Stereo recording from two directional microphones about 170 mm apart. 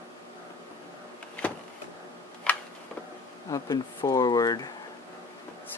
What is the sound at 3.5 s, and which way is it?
Speech, 20° left (ahead or behind).